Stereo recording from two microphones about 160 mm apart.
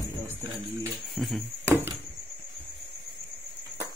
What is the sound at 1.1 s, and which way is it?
Speech, centre (ahead or behind).